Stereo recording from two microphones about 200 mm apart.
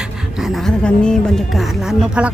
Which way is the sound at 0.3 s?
Centre (ahead or behind).